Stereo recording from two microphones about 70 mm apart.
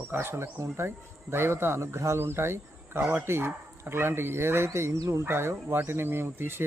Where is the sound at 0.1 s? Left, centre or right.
Right.